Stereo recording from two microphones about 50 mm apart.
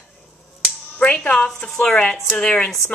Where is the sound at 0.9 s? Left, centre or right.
Left.